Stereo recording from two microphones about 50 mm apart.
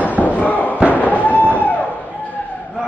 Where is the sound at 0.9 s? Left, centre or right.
Left.